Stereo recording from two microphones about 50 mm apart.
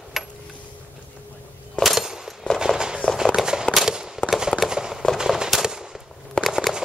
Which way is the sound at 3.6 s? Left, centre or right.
Centre.